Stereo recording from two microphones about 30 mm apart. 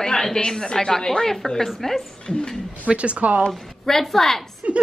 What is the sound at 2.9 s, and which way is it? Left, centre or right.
Speech, right.